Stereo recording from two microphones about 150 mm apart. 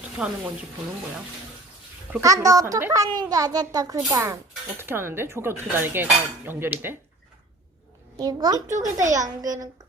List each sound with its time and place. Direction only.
0.2 s speech: 5° right (ahead or behind)
2.2 s a child's voice: 25° right (ahead or behind)
4.8 s dishes: 15° right (ahead or behind)
8.1 s a child's voice: 25° right (ahead or behind)
9.0 s a child's voice: 55° right (ahead or behind)
9.2 s a child's voice: 25° right (ahead or behind)